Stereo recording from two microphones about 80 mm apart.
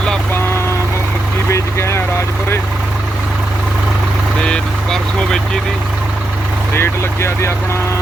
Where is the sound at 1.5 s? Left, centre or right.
Left.